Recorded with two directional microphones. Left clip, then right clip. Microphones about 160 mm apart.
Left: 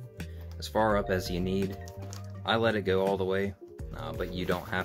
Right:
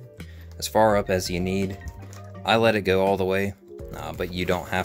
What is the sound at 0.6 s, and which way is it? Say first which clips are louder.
Speech: right 7 dB; 45° right (ahead or behind).